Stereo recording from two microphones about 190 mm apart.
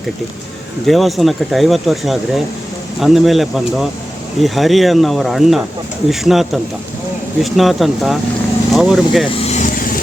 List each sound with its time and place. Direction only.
0.9 s speech: centre (ahead or behind)
9.4 s vehicle: 40° left (ahead or behind)